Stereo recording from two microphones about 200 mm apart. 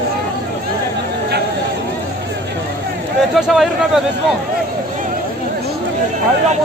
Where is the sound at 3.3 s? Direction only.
Centre (ahead or behind).